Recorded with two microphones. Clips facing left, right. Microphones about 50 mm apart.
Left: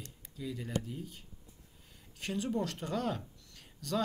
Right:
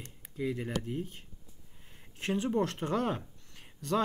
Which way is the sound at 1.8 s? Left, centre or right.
Right.